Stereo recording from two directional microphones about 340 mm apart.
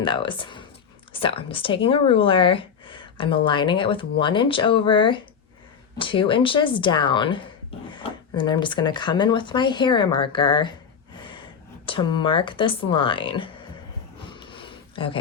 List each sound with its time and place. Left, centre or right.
0.0 s speech: centre
11.2 s gasp: centre
11.9 s speech: centre
14.3 s a sound: centre